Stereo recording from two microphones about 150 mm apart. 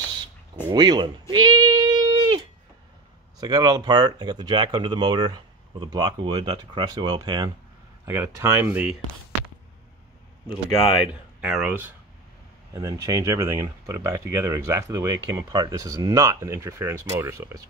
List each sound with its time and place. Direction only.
0.7 s speech: 30° right (ahead or behind)
1.3 s a sound: 25° right (ahead or behind)
3.3 s speech: 25° right (ahead or behind); by 8.9 s 10° right (ahead or behind)
11.4 s speech: 5° right (ahead or behind)
12.7 s speech: 25° right (ahead or behind)